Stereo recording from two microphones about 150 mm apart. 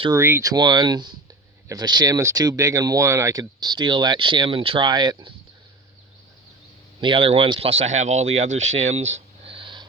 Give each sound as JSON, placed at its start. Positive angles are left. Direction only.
{"t": 0.1, "sound": "speech", "side_deg": -15}
{"t": 7.0, "sound": "speech", "side_deg": -35}